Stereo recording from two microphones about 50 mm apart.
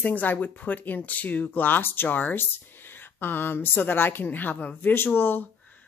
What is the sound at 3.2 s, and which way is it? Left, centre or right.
Speech, left.